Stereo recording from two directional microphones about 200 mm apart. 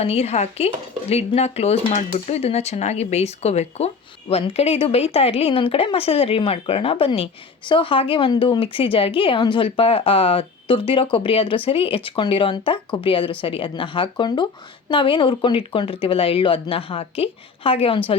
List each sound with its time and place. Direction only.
0.0 s speech: 30° left (ahead or behind)